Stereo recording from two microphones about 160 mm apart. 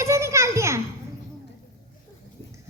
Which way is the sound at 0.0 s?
15° right (ahead or behind).